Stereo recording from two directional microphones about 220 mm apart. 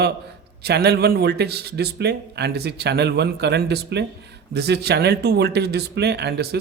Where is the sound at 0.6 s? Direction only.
45° right (ahead or behind).